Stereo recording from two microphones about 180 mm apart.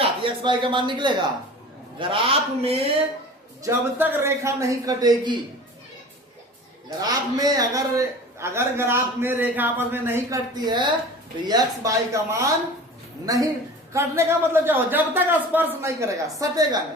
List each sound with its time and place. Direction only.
0.0 s a man's voice: 30° right (ahead or behind)
3.6 s a man's voice: 15° right (ahead or behind)
7.0 s a man's voice: 20° right (ahead or behind)